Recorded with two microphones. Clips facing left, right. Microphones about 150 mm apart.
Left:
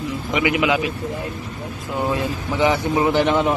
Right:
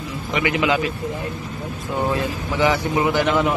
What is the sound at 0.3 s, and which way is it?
Speech, 15° left (ahead or behind).